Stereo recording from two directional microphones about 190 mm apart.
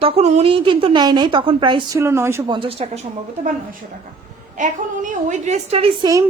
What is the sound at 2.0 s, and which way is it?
A woman's voice, 15° right (ahead or behind).